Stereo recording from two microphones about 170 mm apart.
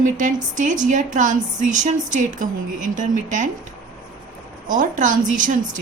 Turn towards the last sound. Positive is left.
turn(degrees=-50)  # may be behind; listen again after turning